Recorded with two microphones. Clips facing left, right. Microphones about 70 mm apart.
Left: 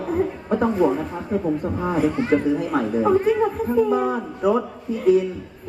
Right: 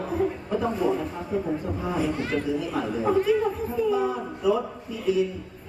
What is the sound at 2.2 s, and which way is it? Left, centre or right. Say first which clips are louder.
Speech: left 8 dB; left.